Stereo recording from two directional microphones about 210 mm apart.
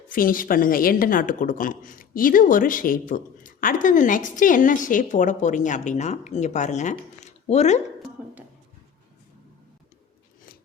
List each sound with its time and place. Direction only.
0.1 s a woman's voice: 40° left (ahead or behind)